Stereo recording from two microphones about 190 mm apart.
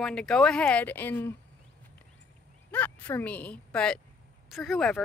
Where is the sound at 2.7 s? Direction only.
10° left (ahead or behind).